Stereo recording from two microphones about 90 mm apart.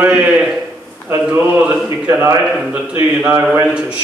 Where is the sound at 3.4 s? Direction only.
20° right (ahead or behind).